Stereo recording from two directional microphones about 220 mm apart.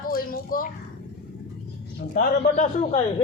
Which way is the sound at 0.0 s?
40° left (ahead or behind).